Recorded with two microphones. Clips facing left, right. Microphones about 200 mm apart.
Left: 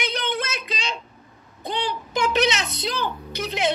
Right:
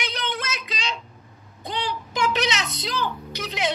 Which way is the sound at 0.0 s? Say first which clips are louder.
Left 3 dB; 55° left (ahead or behind).